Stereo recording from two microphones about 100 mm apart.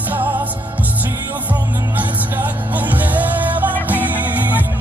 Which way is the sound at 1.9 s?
15° right (ahead or behind).